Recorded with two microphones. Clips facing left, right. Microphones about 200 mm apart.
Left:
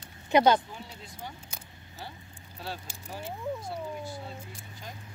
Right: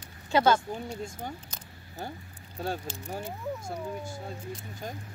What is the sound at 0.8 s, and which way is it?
Speech, 45° right (ahead or behind).